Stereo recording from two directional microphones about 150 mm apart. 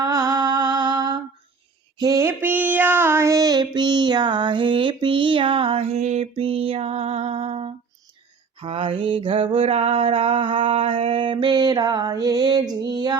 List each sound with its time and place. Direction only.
0.0 s mantra: 25° right (ahead or behind)
2.0 s child singing: 20° right (ahead or behind); by 7.7 s 40° right (ahead or behind)
8.6 s a sound: 40° right (ahead or behind)